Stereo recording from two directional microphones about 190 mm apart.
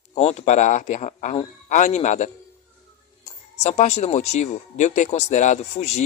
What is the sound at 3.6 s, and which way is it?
Speech, 35° left (ahead or behind).